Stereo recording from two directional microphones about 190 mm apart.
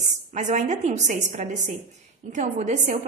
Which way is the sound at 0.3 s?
40° right (ahead or behind).